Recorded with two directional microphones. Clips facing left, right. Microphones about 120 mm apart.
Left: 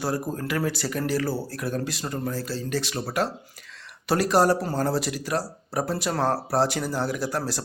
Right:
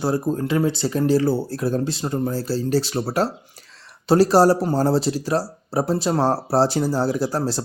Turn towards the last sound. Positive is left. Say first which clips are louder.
# right 6 dB
turn(degrees=-30)  # may be behind; listen again after turning